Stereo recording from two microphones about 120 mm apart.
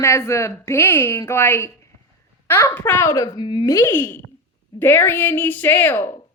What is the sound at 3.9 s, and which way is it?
A woman's voice, 15° left (ahead or behind).